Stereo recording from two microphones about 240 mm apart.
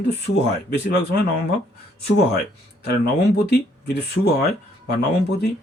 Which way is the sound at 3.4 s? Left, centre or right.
Left.